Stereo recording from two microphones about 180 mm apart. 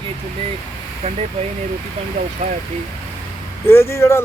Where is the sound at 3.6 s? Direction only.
15° left (ahead or behind).